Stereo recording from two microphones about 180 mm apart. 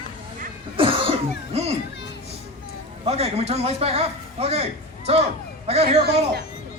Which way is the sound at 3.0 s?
35° right (ahead or behind).